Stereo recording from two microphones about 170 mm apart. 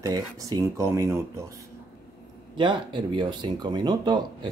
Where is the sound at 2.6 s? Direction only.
30° right (ahead or behind).